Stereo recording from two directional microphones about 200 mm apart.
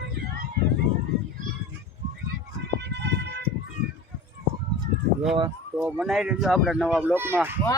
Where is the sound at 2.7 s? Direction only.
60° right (ahead or behind).